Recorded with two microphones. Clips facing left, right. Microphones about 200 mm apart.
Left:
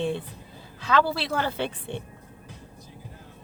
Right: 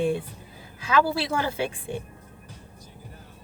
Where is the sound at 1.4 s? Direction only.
10° right (ahead or behind).